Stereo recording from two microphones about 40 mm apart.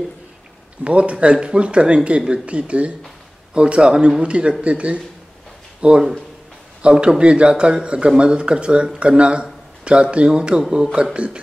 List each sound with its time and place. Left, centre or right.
0.8 s a man's voice: right